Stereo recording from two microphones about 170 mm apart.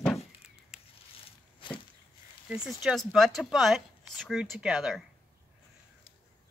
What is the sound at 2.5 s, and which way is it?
Speech, 5° right (ahead or behind).